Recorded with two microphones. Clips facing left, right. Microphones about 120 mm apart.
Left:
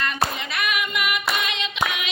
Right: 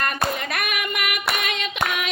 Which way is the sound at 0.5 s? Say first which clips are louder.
Left 1 dB; 50° right (ahead or behind).